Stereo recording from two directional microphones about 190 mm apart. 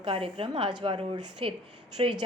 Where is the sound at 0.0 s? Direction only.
30° right (ahead or behind).